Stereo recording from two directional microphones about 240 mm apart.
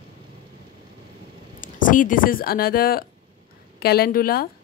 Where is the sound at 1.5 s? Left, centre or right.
Left.